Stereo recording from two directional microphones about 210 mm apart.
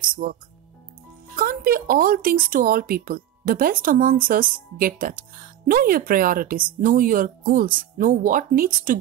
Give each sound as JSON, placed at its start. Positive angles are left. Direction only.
{"t": 0.0, "sound": "music", "side_deg": -40}
{"t": 1.3, "sound": "speech", "side_deg": -40}